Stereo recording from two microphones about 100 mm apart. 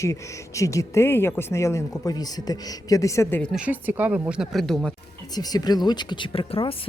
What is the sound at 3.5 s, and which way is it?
Speech, 15° right (ahead or behind).